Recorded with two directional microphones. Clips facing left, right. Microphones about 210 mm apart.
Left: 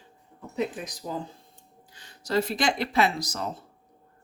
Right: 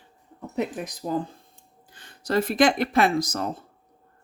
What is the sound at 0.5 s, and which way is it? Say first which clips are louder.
Speech: right 2 dB; 55° right (ahead or behind).